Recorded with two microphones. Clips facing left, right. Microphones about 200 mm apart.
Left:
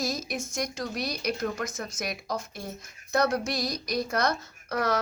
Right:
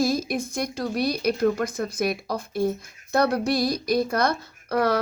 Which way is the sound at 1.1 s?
55° right (ahead or behind).